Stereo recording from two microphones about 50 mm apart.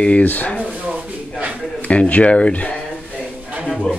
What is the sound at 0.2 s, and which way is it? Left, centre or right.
Speech, left.